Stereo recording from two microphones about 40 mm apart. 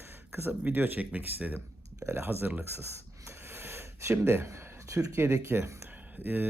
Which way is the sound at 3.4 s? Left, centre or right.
Right.